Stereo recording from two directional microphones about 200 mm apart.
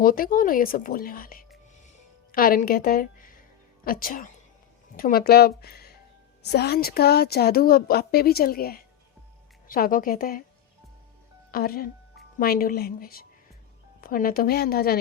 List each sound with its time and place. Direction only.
0.0 s a woman's voice: 45° left (ahead or behind)
11.5 s speech: 45° left (ahead or behind)